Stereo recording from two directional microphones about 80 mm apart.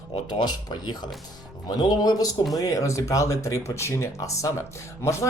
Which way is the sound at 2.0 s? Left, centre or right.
Left.